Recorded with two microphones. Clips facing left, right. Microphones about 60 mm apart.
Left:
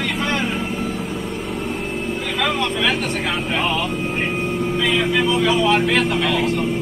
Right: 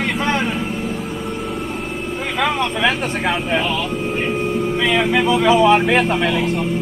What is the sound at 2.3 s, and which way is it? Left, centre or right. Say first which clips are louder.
Vehicle: right 2 dB; right.